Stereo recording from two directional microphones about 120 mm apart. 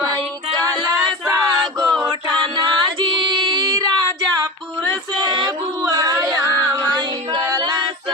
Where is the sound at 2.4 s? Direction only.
40° right (ahead or behind).